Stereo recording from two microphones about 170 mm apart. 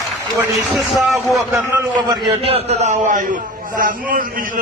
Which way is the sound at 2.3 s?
35° right (ahead or behind).